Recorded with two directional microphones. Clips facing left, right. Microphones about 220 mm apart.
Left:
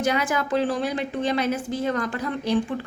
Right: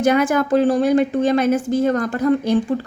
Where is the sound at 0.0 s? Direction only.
50° right (ahead or behind).